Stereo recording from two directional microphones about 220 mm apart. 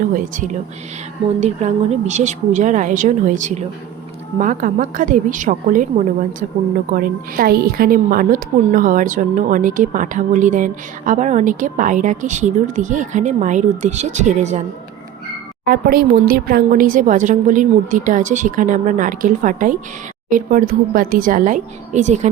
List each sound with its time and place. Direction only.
0.1 s a woman's voice: 35° right (ahead or behind)
6.9 s a woman's voice: 40° right (ahead or behind)
15.6 s a woman's voice: 45° right (ahead or behind)